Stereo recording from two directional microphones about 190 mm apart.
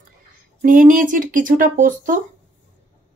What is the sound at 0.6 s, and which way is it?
Speech, 45° right (ahead or behind).